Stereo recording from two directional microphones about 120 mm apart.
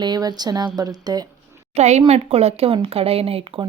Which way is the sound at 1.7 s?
70° right (ahead or behind).